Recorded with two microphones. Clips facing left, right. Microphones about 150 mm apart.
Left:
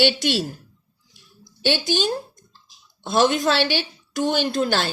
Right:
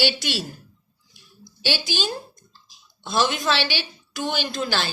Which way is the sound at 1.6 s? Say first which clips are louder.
Left 5 dB; 60° left (ahead or behind).